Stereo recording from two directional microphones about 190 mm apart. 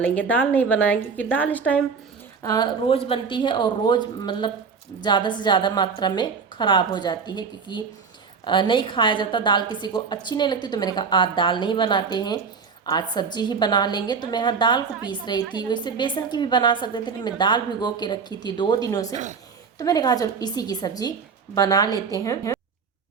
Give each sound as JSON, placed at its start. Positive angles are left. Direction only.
{"t": 0.0, "sound": "a woman's voice", "side_deg": 10}
{"t": 2.4, "sound": "a woman's voice", "side_deg": 20}
{"t": 19.1, "sound": "a woman's voice", "side_deg": -40}
{"t": 19.8, "sound": "a woman's voice", "side_deg": 20}